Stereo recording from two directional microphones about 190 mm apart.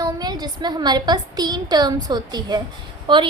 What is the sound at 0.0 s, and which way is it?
A woman's voice, 20° right (ahead or behind).